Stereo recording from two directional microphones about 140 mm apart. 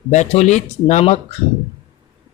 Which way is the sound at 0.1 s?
55° left (ahead or behind).